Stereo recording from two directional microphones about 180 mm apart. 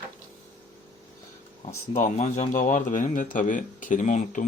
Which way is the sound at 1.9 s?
40° left (ahead or behind).